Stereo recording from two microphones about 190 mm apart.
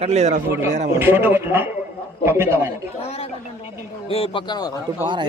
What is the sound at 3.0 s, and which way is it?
A woman's voice, 35° left (ahead or behind).